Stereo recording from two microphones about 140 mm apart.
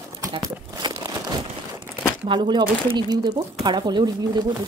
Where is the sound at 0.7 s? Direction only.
25° right (ahead or behind).